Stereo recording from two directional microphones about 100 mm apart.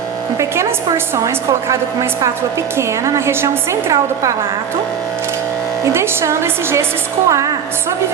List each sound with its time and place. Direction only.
0.3 s a woman's voice: 30° right (ahead or behind)
5.8 s a woman's voice: 25° right (ahead or behind)